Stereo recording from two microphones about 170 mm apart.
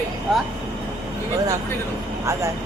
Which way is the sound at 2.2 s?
15° right (ahead or behind).